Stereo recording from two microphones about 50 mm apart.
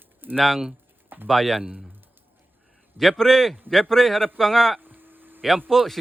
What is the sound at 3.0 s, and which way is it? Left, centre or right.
Speech, centre.